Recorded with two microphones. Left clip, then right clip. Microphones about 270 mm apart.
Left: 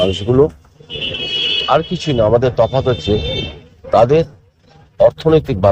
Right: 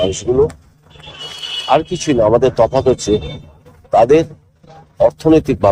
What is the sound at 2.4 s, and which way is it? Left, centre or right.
Speech, left.